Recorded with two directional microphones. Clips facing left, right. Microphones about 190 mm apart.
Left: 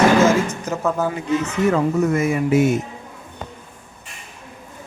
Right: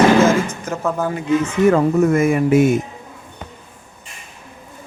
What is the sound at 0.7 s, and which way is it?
Speech, 5° left (ahead or behind).